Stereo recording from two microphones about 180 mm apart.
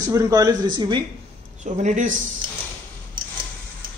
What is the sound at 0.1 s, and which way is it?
Speech, 20° right (ahead or behind).